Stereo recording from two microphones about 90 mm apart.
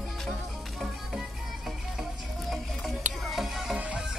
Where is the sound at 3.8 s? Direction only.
15° right (ahead or behind).